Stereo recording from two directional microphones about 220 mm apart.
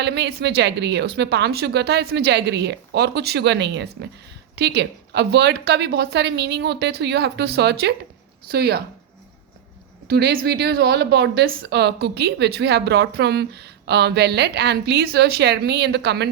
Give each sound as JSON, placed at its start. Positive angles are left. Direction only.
{"t": 0.0, "sound": "a woman's voice", "side_deg": -50}
{"t": 10.1, "sound": "a woman's voice", "side_deg": -45}